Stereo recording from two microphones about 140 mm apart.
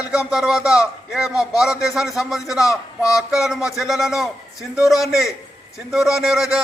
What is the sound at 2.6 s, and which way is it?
Speech, 20° left (ahead or behind).